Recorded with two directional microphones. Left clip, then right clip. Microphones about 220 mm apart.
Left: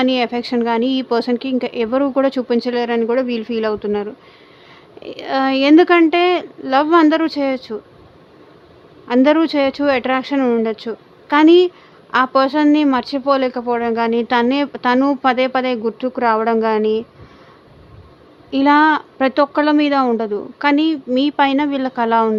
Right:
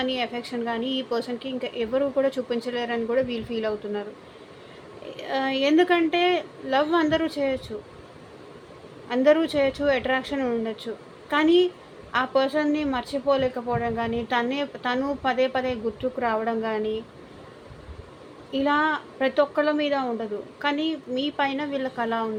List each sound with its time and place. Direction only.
0.0 s speech: 40° left (ahead or behind)
5.1 s speech: 40° left (ahead or behind)
9.0 s speech: 40° left (ahead or behind)
18.5 s a woman's voice: 45° left (ahead or behind)